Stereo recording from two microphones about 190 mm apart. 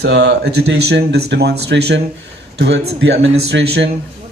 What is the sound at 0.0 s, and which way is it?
A man's voice, 60° right (ahead or behind).